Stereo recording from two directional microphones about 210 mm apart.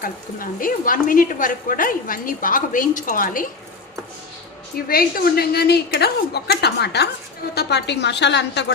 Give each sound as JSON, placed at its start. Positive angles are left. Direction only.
{"t": 0.0, "sound": "a woman's voice", "side_deg": 40}
{"t": 4.9, "sound": "a woman's voice", "side_deg": 45}